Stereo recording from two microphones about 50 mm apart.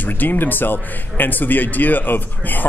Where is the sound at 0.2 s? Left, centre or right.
Left.